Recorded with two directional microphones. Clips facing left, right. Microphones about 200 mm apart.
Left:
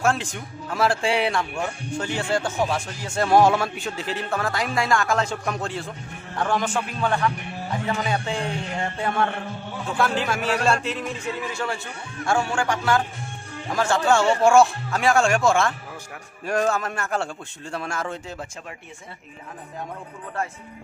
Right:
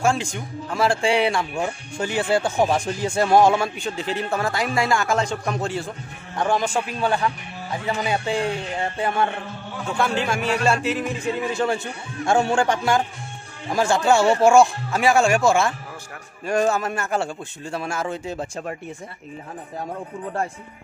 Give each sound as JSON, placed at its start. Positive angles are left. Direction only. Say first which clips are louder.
{"t": 0.0, "sound": "a man's voice", "louder": "right 2 dB", "side_deg": 0}
{"t": 1.6, "sound": "a man's voice", "louder": "right 2 dB", "side_deg": -10}
{"t": 3.2, "sound": "a man's voice", "louder": "right 1 dB", "side_deg": 0}
{"t": 6.3, "sound": "a man's voice", "louder": "right 2 dB", "side_deg": -15}
{"t": 7.8, "sound": "a man's voice", "louder": "right 2 dB", "side_deg": -10}
{"t": 9.9, "sound": "a man's voice", "louder": "right 1 dB", "side_deg": 0}
{"t": 11.3, "sound": "a man's voice", "louder": "right 6 dB", "side_deg": -20}
{"t": 18.0, "sound": "a man's voice", "louder": "right 4 dB", "side_deg": -15}